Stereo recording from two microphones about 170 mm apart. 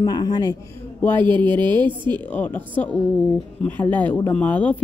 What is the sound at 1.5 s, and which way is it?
Speech, 25° right (ahead or behind).